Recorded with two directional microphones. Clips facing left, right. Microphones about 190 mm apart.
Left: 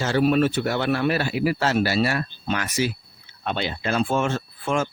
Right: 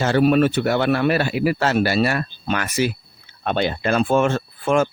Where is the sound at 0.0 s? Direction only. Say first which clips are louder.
Right 3 dB; 60° right (ahead or behind).